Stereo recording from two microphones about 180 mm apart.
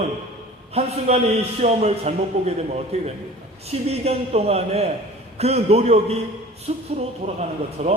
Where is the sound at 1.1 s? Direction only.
35° right (ahead or behind).